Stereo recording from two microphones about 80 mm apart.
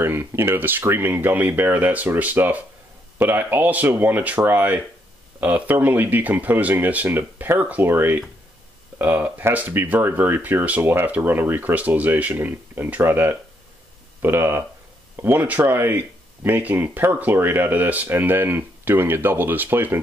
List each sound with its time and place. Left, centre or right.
0.0 s speech: right